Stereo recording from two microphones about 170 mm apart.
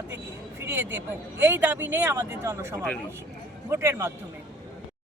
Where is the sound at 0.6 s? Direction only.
15° right (ahead or behind).